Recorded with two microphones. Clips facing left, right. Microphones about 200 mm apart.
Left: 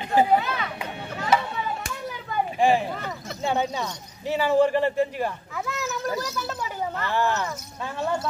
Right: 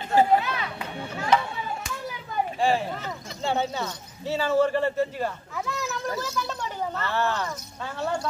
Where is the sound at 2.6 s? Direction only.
15° left (ahead or behind).